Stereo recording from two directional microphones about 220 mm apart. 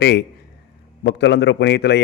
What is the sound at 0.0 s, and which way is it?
A man's voice, 50° left (ahead or behind).